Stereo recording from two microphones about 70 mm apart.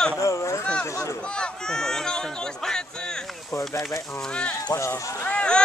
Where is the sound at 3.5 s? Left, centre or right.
Left.